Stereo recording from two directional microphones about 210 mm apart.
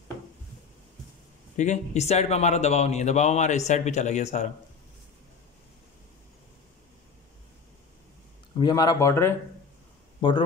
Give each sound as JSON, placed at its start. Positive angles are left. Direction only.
{"t": 1.6, "sound": "speech", "side_deg": 35}
{"t": 8.5, "sound": "speech", "side_deg": 20}